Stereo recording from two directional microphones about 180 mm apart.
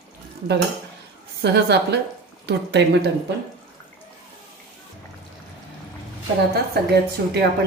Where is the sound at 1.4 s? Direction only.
70° right (ahead or behind).